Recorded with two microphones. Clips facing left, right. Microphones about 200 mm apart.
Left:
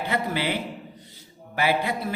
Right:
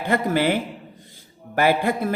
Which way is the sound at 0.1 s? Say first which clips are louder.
Right 8 dB; 50° right (ahead or behind).